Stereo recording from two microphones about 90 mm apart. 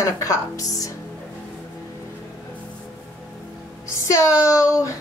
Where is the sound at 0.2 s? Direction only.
35° left (ahead or behind).